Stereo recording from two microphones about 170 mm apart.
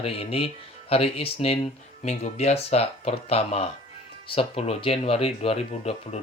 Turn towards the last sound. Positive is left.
turn(degrees=40)  # may be behind; listen again after turning